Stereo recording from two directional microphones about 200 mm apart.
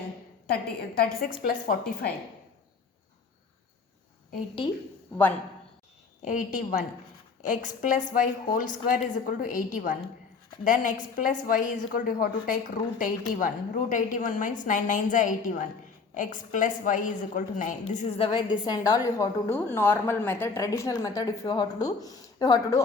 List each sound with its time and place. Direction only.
0.4 s a woman's voice: 50° left (ahead or behind)
6.2 s a woman's voice: 40° left (ahead or behind); by 22.8 s 15° left (ahead or behind)